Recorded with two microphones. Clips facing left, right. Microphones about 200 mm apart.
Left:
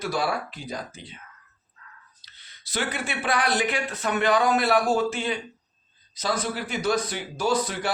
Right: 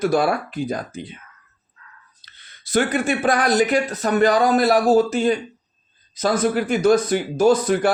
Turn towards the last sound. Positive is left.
turn(degrees=-50)  # may be behind; listen again after turning